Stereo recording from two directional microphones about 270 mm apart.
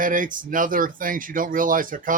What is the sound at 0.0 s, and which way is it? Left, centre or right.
Speech, right.